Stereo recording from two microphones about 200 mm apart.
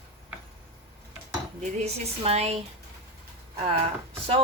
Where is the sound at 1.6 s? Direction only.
35° right (ahead or behind).